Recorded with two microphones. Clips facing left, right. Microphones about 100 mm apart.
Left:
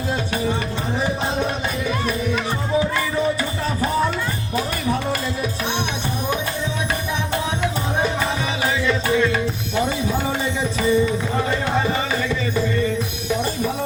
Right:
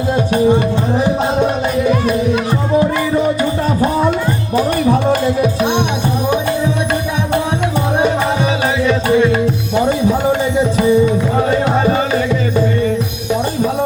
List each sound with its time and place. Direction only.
4.5 s music: 40° right (ahead or behind)
9.1 s music: 20° right (ahead or behind)